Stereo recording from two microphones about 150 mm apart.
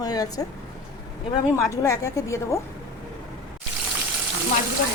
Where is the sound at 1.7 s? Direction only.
20° left (ahead or behind).